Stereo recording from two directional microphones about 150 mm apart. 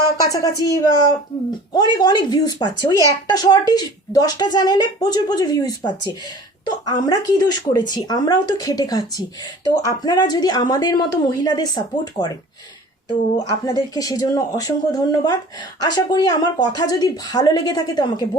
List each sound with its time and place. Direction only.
0.3 s speech: 25° left (ahead or behind)
13.7 s speech: 25° left (ahead or behind)